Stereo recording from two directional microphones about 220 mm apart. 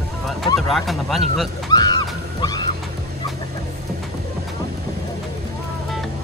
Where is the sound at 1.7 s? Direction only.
20° left (ahead or behind).